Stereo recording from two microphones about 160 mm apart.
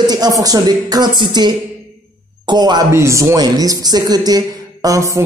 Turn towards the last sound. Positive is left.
turn(degrees=-20)  # may be behind; listen again after turning